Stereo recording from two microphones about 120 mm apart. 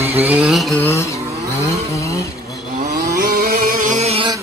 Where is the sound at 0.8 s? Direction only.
25° left (ahead or behind).